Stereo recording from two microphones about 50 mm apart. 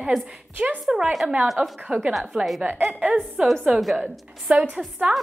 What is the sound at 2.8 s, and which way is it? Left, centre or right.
Speech, right.